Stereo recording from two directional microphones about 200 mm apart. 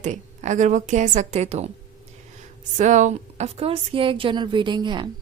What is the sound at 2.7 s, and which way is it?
A woman's voice, 35° right (ahead or behind).